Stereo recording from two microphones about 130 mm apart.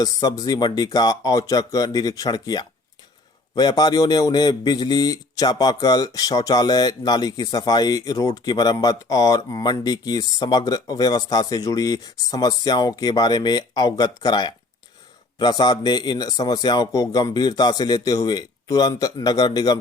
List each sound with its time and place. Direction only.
0.0 s a man's voice: 30° left (ahead or behind)